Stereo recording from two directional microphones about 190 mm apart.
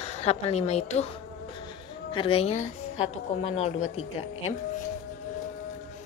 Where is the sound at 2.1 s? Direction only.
30° left (ahead or behind).